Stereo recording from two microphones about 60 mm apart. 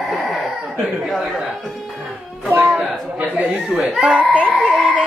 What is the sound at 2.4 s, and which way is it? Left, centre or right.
Speech, right.